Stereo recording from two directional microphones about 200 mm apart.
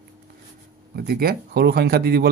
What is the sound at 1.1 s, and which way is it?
Speech, 50° right (ahead or behind).